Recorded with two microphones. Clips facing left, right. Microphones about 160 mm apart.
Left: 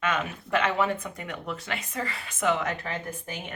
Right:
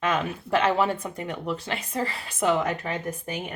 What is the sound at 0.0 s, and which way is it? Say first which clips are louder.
Speech: right 3 dB; 35° right (ahead or behind).